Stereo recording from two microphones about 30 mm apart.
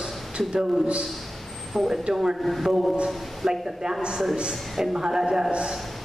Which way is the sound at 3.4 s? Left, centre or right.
Centre.